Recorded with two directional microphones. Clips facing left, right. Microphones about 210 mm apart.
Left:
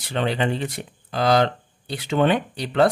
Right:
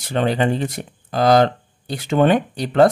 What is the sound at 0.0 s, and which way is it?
Speech, 45° right (ahead or behind).